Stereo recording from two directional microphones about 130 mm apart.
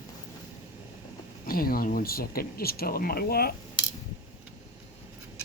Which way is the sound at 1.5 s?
90° left.